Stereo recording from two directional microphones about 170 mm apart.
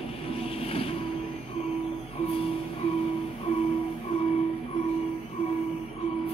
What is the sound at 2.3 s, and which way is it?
Music, 35° left (ahead or behind).